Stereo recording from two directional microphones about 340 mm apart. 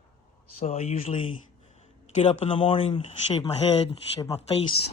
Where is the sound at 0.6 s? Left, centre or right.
Centre.